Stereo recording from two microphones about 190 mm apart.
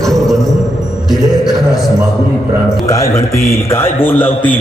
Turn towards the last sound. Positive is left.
turn(degrees=10)  # may be behind; listen again after turning